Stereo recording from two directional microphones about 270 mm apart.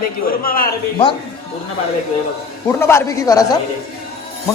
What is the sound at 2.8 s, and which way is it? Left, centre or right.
Speech, centre.